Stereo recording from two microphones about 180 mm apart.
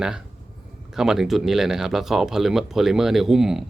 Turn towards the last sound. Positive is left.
turn(degrees=0)  # may be behind; listen again after turning